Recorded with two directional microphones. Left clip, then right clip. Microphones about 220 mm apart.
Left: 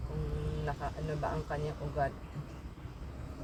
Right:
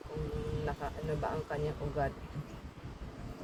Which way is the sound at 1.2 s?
5° left (ahead or behind).